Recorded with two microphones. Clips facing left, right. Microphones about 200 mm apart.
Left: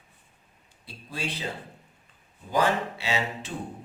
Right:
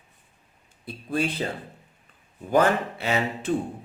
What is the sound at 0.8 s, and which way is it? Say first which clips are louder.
Speech: right 12 dB; 55° right (ahead or behind).